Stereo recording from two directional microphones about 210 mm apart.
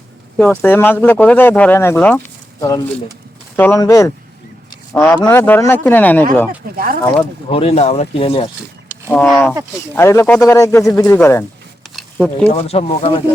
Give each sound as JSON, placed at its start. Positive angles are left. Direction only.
{"t": 0.3, "sound": "speech", "side_deg": 10}
{"t": 7.5, "sound": "speech", "side_deg": 30}
{"t": 9.0, "sound": "speech", "side_deg": 5}
{"t": 11.9, "sound": "a sound", "side_deg": 5}
{"t": 12.5, "sound": "speech", "side_deg": 30}